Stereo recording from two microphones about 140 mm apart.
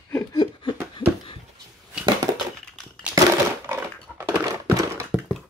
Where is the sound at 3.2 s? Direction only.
20° right (ahead or behind).